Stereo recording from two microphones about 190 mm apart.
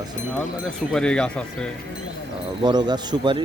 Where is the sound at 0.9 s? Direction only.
5° left (ahead or behind).